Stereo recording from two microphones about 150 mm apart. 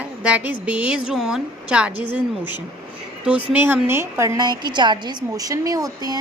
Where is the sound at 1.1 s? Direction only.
5° right (ahead or behind).